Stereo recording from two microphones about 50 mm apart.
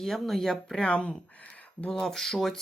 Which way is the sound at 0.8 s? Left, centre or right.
Left.